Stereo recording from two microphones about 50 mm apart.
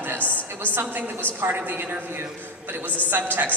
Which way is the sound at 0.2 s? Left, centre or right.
Left.